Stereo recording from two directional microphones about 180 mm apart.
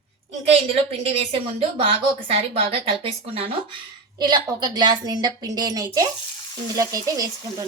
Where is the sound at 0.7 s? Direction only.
35° right (ahead or behind).